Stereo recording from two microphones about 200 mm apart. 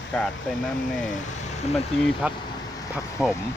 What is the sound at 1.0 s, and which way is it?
Speech, 35° left (ahead or behind).